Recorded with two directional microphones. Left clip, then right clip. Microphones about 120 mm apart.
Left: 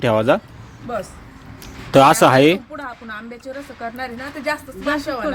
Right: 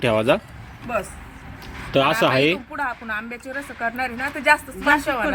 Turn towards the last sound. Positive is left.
turn(degrees=0)  # may be behind; listen again after turning